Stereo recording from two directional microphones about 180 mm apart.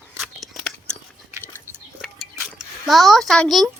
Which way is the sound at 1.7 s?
15° left (ahead or behind).